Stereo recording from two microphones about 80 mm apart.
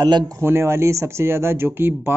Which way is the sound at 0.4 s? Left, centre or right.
Right.